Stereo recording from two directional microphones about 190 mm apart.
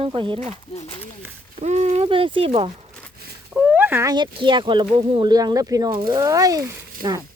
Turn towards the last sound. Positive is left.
turn(degrees=-20)  # may be behind; listen again after turning